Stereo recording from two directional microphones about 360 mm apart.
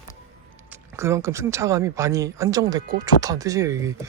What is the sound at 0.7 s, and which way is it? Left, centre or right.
Speech, centre.